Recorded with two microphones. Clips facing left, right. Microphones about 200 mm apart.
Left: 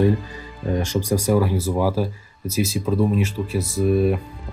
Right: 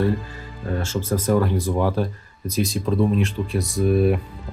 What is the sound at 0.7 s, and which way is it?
Speech, 15° left (ahead or behind).